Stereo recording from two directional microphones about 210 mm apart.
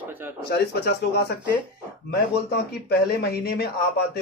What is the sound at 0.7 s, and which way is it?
Speech, 50° left (ahead or behind).